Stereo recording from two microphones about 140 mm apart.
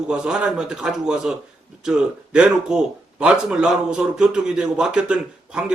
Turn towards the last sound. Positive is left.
turn(degrees=-5)  # may be behind; listen again after turning